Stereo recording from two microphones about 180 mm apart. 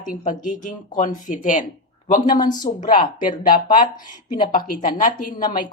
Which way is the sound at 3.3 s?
45° left (ahead or behind).